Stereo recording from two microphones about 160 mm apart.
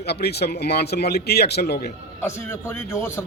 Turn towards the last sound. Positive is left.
turn(degrees=15)  # may be behind; listen again after turning